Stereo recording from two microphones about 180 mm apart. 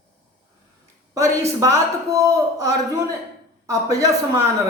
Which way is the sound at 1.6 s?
15° right (ahead or behind).